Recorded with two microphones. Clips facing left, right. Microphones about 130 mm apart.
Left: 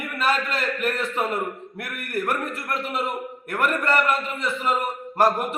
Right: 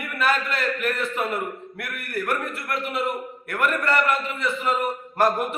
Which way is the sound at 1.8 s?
40° left (ahead or behind).